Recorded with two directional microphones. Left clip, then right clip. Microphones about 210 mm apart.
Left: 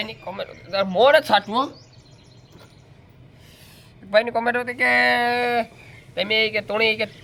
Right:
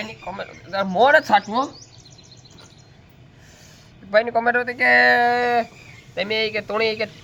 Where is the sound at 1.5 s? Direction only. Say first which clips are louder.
Even; 5° left (ahead or behind).